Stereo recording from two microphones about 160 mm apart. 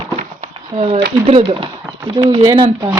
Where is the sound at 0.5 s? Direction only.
35° right (ahead or behind).